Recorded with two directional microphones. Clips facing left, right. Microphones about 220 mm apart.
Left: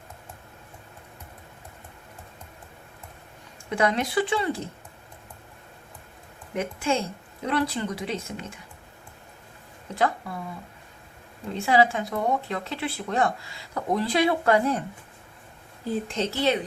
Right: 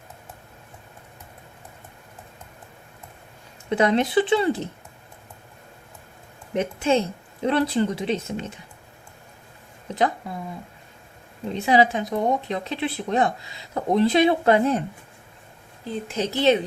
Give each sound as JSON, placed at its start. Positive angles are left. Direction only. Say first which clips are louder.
{"t": 3.7, "sound": "speech", "louder": "right 4 dB", "side_deg": -25}
{"t": 6.6, "sound": "speech", "louder": "right 5 dB", "side_deg": -25}
{"t": 9.9, "sound": "speech", "louder": "right 2 dB", "side_deg": -20}
{"t": 11.5, "sound": "speech", "louder": "right 2 dB", "side_deg": -20}
{"t": 15.8, "sound": "speech", "louder": "left 2 dB", "side_deg": 5}
{"t": 16.1, "sound": "speech", "louder": "right 6 dB", "side_deg": -15}